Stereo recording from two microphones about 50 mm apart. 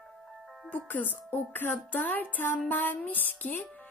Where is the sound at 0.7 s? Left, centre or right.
Left.